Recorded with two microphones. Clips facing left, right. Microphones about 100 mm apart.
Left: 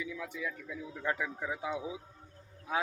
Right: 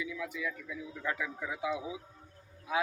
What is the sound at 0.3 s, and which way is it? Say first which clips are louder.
Speech: right 1 dB; 35° left (ahead or behind).